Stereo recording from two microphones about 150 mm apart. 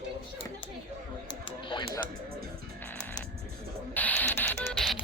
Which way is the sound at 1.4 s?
35° left (ahead or behind).